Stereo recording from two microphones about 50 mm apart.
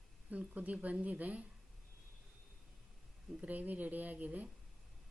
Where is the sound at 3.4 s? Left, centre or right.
Right.